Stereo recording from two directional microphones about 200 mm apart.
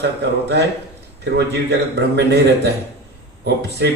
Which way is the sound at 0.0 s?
60° right (ahead or behind).